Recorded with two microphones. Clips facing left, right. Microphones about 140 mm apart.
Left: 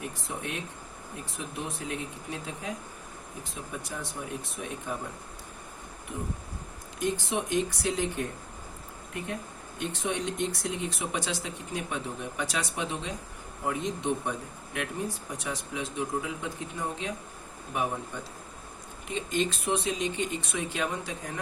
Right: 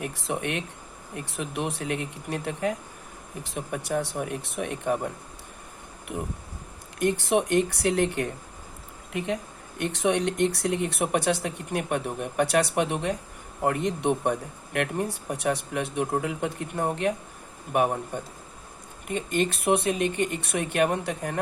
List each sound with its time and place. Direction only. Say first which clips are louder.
0.0 s speech: right 6 dB; 70° right (ahead or behind)
6.1 s speech: right 3 dB; 60° right (ahead or behind)
9.1 s speech: right 7 dB; 85° right; by 21.3 s 65° right (ahead or behind)